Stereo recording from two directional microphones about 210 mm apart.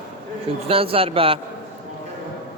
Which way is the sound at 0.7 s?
25° right (ahead or behind).